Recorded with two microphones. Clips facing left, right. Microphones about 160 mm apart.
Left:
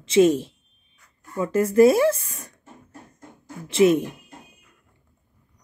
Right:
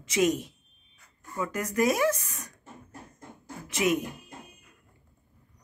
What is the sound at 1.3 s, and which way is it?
A woman's voice, 30° left (ahead or behind).